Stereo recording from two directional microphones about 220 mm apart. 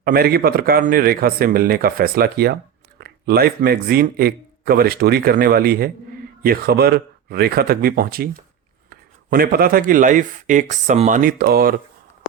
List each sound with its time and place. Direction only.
0.0 s a man's voice: 45° right (ahead or behind)